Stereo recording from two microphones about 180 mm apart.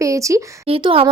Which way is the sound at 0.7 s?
30° right (ahead or behind).